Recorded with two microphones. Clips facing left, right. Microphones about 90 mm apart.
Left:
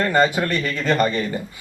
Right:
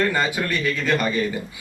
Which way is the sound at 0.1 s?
45° left (ahead or behind).